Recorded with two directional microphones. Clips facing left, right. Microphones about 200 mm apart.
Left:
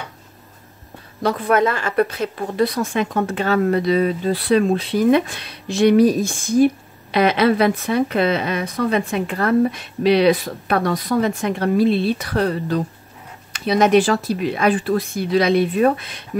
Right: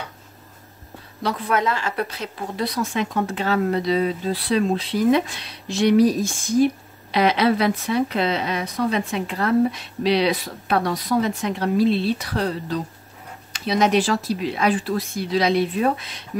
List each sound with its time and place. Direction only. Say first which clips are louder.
1.2 s a woman's voice: left 5 dB; 50° left (ahead or behind)